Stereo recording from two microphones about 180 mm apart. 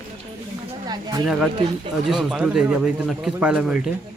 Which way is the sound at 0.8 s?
25° right (ahead or behind).